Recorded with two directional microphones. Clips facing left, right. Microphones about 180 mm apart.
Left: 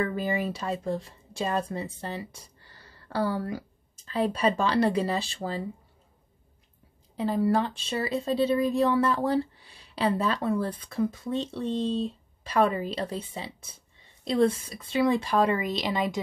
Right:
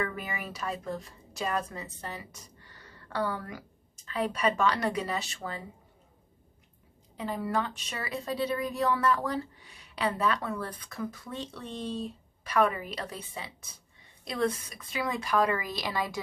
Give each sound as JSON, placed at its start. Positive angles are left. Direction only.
{"t": 0.0, "sound": "a woman's voice", "side_deg": 30}
{"t": 7.2, "sound": "a woman's voice", "side_deg": 35}